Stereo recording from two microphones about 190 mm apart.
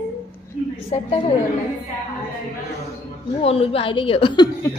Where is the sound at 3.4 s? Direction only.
30° left (ahead or behind).